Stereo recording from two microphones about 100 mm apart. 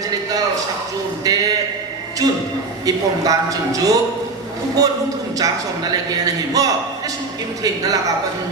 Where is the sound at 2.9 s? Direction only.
35° right (ahead or behind).